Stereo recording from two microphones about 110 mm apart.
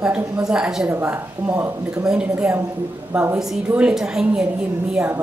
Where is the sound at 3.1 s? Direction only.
20° right (ahead or behind).